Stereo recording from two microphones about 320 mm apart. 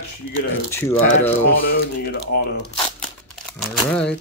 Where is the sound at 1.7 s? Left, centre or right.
Left.